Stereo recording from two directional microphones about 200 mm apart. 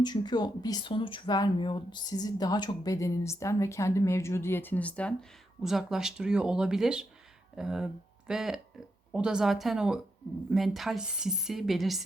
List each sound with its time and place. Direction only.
0.0 s a woman's voice: 20° left (ahead or behind); by 12.0 s centre (ahead or behind)